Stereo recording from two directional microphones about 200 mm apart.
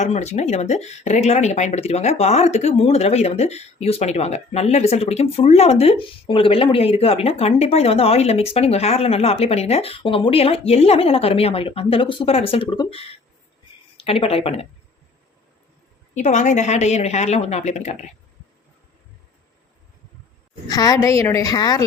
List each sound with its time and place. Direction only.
0.0 s speech: 35° left (ahead or behind)
16.1 s speech: 35° left (ahead or behind)
20.7 s a woman's voice: 20° left (ahead or behind)